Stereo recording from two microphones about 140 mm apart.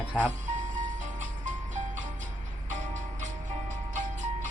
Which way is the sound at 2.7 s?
65° right (ahead or behind).